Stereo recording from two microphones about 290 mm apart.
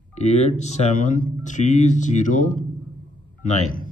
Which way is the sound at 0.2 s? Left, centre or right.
Left.